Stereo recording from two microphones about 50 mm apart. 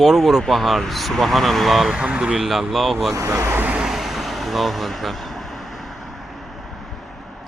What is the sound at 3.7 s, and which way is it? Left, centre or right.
Vehicle, centre.